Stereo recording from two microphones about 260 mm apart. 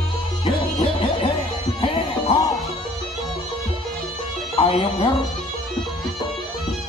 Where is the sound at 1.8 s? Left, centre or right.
Left.